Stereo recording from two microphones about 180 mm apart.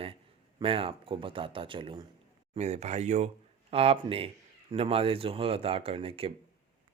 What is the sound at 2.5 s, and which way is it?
Speech, 40° right (ahead or behind).